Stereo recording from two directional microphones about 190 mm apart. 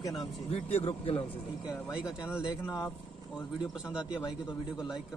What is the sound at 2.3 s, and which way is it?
Speech, 15° left (ahead or behind).